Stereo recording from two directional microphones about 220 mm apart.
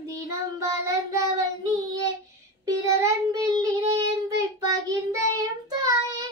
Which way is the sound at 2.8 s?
15° right (ahead or behind).